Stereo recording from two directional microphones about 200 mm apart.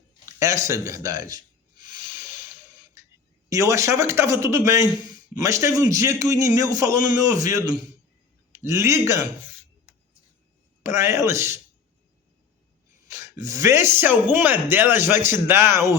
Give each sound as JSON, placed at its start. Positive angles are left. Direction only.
{"t": 0.3, "sound": "speech", "side_deg": -15}
{"t": 1.8, "sound": "hiss", "side_deg": -20}
{"t": 3.5, "sound": "speech", "side_deg": -15}
{"t": 10.8, "sound": "speech", "side_deg": -15}
{"t": 13.1, "sound": "speech", "side_deg": -15}